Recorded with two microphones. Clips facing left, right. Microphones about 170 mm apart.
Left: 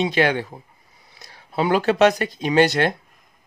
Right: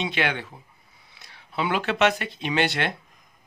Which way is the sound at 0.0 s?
40° left (ahead or behind).